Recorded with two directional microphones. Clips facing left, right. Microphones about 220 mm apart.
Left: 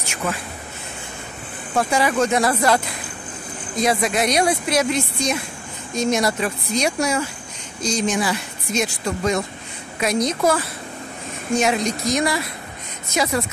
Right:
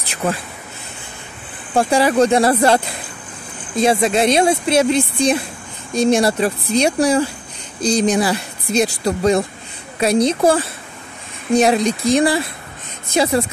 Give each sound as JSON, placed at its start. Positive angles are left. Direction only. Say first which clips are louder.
{"t": 0.0, "sound": "speech", "louder": "right 5 dB", "side_deg": -35}
{"t": 1.8, "sound": "speech", "louder": "right 5 dB", "side_deg": -30}